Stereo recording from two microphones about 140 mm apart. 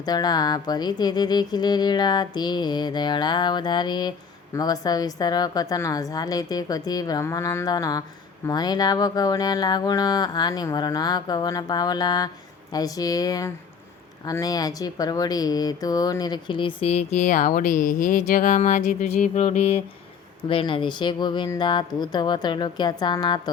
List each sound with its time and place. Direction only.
0.0 s music: 30° left (ahead or behind)
4.5 s speech: 25° left (ahead or behind); by 19.8 s 50° left (ahead or behind)
20.5 s music: 40° left (ahead or behind)